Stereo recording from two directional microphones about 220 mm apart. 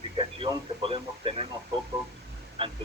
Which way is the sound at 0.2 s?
20° right (ahead or behind).